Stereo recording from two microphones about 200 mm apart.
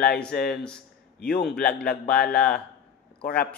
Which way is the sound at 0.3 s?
55° left (ahead or behind).